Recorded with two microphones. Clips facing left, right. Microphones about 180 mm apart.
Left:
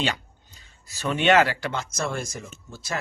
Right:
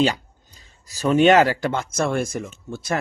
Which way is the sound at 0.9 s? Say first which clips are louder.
Right 6 dB; 40° right (ahead or behind).